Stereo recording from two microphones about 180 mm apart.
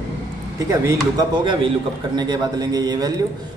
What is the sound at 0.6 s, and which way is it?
Speech, 20° right (ahead or behind).